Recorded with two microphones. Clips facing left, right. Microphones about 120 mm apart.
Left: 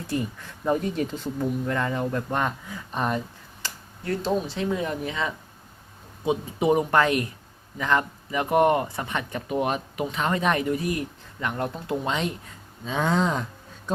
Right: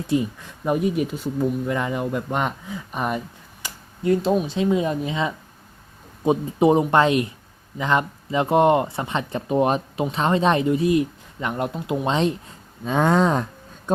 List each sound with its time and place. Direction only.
0.1 s speech: 15° right (ahead or behind)
6.2 s speech: 35° right (ahead or behind); by 12.0 s 15° right (ahead or behind)
12.0 s speech: 30° right (ahead or behind)
12.8 s speech: 55° right (ahead or behind)